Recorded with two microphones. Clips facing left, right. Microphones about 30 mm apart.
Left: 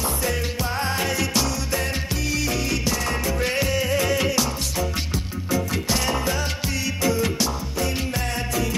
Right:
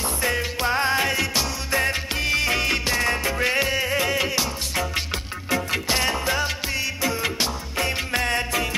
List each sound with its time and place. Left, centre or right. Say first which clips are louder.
0.2 s music: right 2 dB; right
1.7 s music: right 3 dB; right; by 4.5 s centre
4.7 s music: right 1 dB; right
5.7 s music: right 1 dB; right
7.7 s music: right 2 dB; right